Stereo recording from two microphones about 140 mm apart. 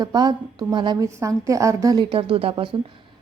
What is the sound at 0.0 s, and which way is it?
A woman's voice, 30° right (ahead or behind).